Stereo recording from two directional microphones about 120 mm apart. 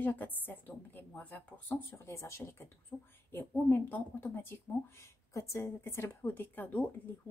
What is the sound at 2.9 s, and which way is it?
A woman's voice, 5° left (ahead or behind).